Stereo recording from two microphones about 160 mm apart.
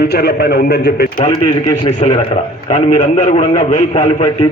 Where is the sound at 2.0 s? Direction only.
45° left (ahead or behind).